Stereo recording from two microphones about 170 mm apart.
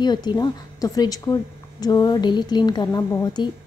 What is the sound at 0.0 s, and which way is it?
A woman's voice, 25° left (ahead or behind).